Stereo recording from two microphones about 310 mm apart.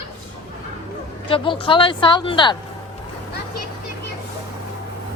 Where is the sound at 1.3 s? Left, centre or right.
Centre.